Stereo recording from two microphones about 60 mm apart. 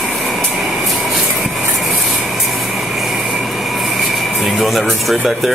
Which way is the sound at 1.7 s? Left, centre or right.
Centre.